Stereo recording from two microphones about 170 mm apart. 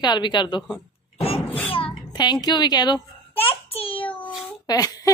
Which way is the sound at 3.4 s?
35° left (ahead or behind).